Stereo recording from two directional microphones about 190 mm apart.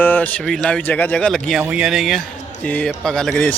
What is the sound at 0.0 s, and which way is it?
A man's voice, 10° left (ahead or behind).